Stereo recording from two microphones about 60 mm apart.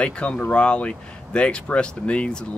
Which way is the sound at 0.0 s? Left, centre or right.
Centre.